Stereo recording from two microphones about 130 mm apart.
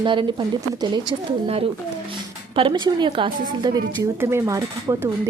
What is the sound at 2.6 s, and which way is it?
Speech, 40° right (ahead or behind).